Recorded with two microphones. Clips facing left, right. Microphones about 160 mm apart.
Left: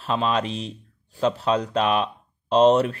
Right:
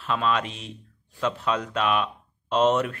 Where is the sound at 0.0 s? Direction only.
35° left (ahead or behind).